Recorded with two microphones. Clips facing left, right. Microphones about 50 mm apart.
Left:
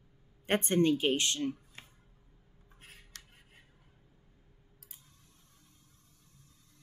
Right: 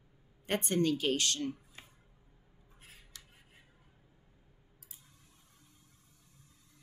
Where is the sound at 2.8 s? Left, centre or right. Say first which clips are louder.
Left 3 dB; left.